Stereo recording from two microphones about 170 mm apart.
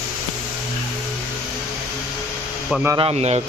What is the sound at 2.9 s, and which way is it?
Speech, 35° right (ahead or behind).